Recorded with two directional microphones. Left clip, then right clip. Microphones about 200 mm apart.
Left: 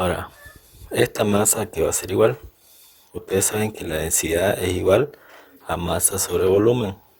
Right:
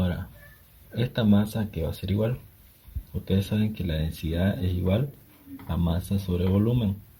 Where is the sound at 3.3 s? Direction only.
45° left (ahead or behind).